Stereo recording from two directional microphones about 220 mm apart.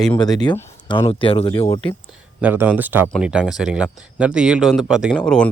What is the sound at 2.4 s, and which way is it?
Speech, 10° right (ahead or behind).